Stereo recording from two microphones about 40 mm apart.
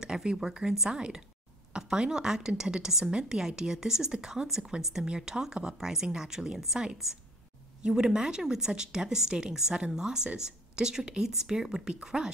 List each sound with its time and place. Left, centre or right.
0.0 s a woman's voice: centre